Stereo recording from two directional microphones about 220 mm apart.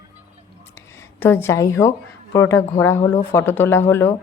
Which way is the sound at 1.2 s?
10° left (ahead or behind).